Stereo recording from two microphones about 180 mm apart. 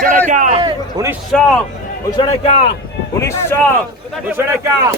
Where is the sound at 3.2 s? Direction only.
15° left (ahead or behind).